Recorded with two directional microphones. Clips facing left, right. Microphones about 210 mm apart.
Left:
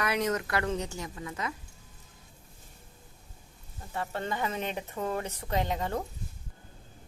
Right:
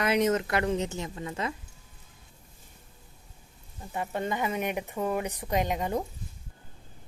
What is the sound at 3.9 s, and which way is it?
Speech, 15° right (ahead or behind).